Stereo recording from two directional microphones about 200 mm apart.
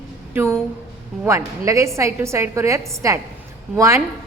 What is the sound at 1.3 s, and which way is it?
A woman's voice, 15° right (ahead or behind).